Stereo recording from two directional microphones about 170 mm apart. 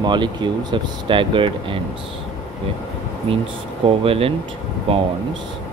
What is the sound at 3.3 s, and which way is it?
Speech, 35° right (ahead or behind).